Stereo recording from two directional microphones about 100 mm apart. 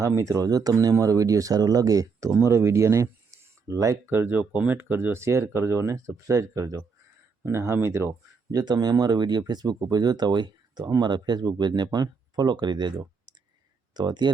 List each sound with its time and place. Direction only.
0.0 s speech: 30° right (ahead or behind)
8.4 s speech: 40° right (ahead or behind)